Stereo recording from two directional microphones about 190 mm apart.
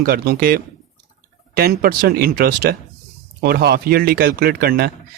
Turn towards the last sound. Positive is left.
turn(degrees=-50)  # may be behind; listen again after turning